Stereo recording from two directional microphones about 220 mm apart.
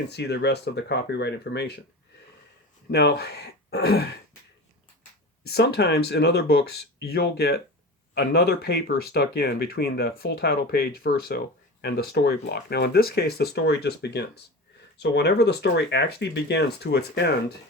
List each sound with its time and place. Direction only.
0.1 s speech: 50° left (ahead or behind)
2.9 s speech: 45° left (ahead or behind)
5.4 s speech: 45° left (ahead or behind)